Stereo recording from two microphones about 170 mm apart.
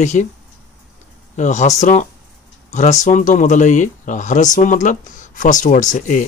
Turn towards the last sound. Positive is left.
turn(degrees=50)  # may be behind; listen again after turning